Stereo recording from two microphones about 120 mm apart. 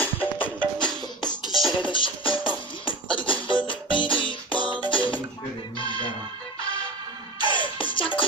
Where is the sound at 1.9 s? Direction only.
45° left (ahead or behind).